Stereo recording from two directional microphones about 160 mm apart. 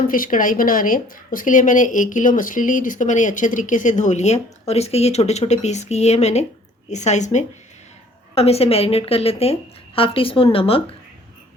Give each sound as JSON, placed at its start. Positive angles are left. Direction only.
{"t": 0.1, "sound": "a woman's voice", "side_deg": 60}